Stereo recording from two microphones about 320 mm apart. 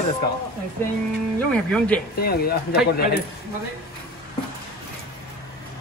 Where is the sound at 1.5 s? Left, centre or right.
Centre.